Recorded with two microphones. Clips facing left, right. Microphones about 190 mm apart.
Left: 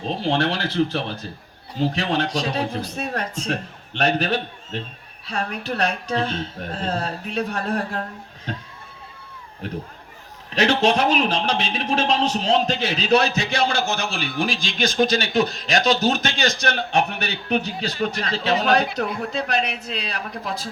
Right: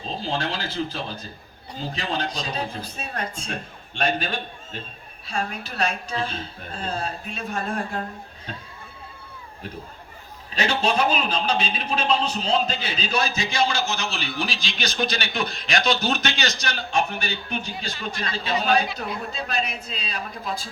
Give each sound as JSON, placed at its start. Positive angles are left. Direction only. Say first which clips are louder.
{"t": 0.0, "sound": "speech", "louder": "left 6 dB", "side_deg": 70}
{"t": 10.5, "sound": "a man's voice", "louder": "left 5 dB", "side_deg": 75}